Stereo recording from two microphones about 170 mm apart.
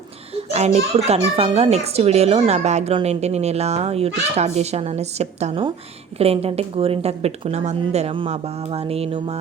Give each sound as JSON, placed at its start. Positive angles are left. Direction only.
{"t": 0.3, "sound": "a child's voice", "side_deg": -40}